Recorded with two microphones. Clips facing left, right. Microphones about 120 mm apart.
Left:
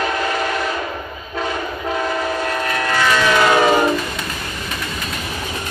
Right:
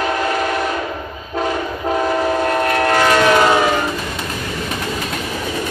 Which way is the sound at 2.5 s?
45° right (ahead or behind).